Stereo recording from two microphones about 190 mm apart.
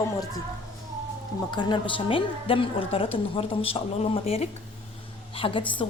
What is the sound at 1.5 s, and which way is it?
A woman's voice, 25° left (ahead or behind).